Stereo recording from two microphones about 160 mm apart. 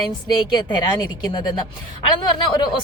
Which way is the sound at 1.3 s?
30° left (ahead or behind).